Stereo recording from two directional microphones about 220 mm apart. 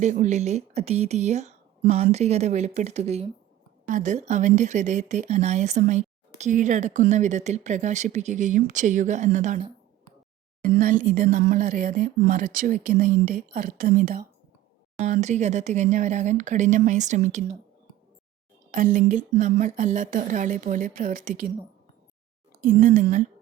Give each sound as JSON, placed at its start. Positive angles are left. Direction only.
{"t": 0.0, "sound": "speech", "side_deg": -35}
{"t": 18.7, "sound": "speech", "side_deg": -40}
{"t": 22.6, "sound": "speech", "side_deg": -35}